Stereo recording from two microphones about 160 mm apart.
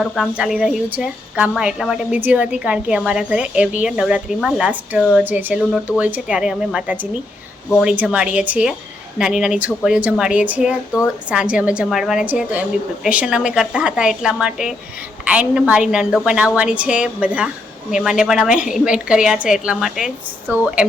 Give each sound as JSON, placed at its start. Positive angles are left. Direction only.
{"t": 0.0, "sound": "a woman's voice", "side_deg": 0}
{"t": 20.5, "sound": "a woman's voice", "side_deg": -15}